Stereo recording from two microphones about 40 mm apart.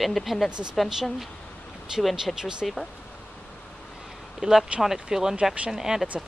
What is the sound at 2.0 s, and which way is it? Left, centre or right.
Speech, centre.